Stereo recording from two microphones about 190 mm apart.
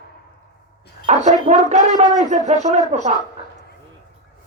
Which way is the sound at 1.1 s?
35° right (ahead or behind).